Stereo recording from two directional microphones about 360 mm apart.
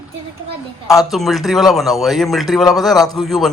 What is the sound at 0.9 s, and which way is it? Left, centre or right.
Speech, centre.